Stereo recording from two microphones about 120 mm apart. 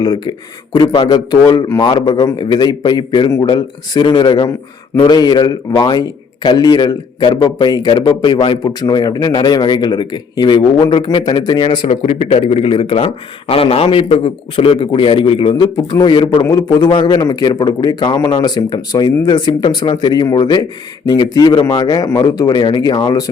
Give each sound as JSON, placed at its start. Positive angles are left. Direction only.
{"t": 0.0, "sound": "a man's voice", "side_deg": 35}
{"t": 11.9, "sound": "a man's voice", "side_deg": 55}